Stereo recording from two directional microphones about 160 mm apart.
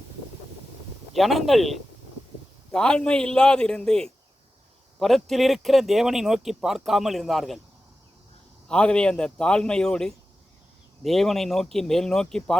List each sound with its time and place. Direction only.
1.1 s speech: centre (ahead or behind)
8.6 s speech: 5° left (ahead or behind)